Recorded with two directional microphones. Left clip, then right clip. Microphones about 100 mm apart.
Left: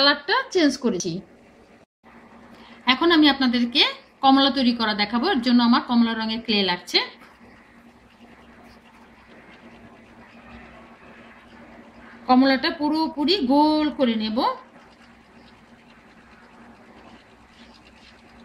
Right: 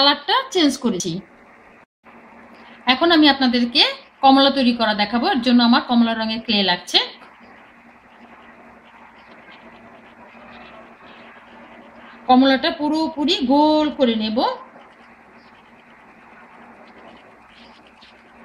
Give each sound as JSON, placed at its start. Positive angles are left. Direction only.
{"t": 0.0, "sound": "speech", "side_deg": -15}
{"t": 2.8, "sound": "a woman's voice", "side_deg": -15}
{"t": 12.3, "sound": "a woman's voice", "side_deg": -15}